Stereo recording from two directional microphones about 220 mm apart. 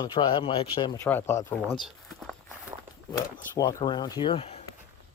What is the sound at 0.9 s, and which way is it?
Speech, 10° left (ahead or behind).